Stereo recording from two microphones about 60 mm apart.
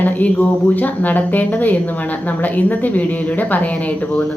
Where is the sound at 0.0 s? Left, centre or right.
Left.